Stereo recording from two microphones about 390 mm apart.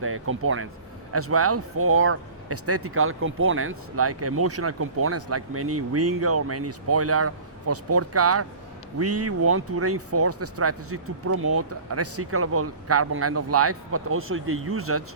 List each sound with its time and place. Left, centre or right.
0.0 s speech: right